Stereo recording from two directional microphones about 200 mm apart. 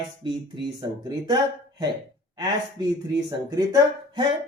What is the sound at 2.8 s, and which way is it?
Speech, 20° right (ahead or behind).